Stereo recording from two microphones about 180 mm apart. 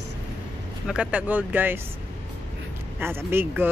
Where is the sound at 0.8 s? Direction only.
5° right (ahead or behind).